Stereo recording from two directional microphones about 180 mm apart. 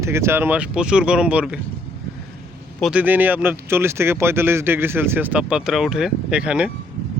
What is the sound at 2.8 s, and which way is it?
Speech, 5° right (ahead or behind).